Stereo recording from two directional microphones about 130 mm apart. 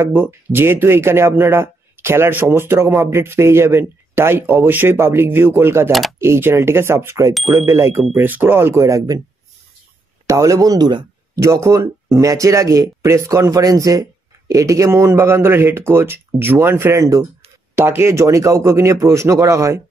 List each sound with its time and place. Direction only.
0.0 s speech: 20° right (ahead or behind)
5.9 s speech: centre (ahead or behind)
6.1 s speech: 20° right (ahead or behind)
8.0 s speech: 10° right (ahead or behind)
10.2 s speech: 25° right (ahead or behind)
11.3 s speech: 25° right (ahead or behind)